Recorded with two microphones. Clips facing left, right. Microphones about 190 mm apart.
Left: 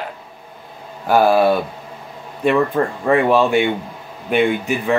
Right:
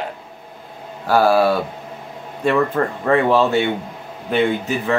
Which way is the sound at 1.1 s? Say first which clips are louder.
Left 1 dB; 20° left (ahead or behind).